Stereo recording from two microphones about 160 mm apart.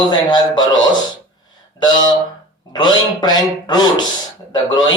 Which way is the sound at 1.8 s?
25° left (ahead or behind).